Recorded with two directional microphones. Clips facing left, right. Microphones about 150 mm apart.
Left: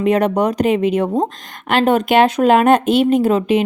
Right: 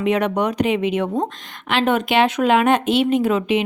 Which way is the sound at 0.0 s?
40° left (ahead or behind).